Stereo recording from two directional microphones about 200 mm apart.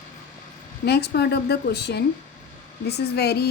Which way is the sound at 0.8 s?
55° left (ahead or behind).